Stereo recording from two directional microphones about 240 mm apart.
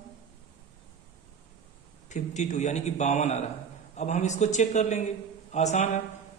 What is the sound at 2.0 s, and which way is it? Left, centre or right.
A man's voice, left.